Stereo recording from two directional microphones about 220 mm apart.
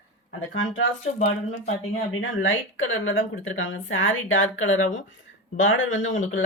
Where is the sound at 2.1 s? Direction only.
65° left (ahead or behind).